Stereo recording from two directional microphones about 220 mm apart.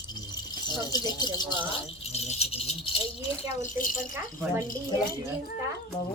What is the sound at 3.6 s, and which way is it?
Speech, 40° left (ahead or behind).